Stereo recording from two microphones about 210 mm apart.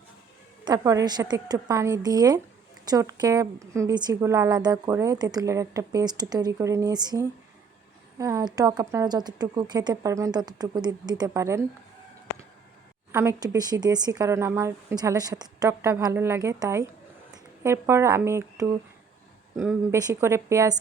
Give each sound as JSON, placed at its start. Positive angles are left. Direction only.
{"t": 0.6, "sound": "speech", "side_deg": -20}
{"t": 13.1, "sound": "speech", "side_deg": -10}
{"t": 19.9, "sound": "speech", "side_deg": -15}